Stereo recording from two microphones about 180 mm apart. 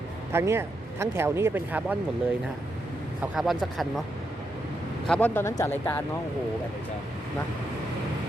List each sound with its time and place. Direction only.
0.3 s speech: 15° right (ahead or behind)
3.3 s speech: centre (ahead or behind)
5.0 s speech: 5° left (ahead or behind)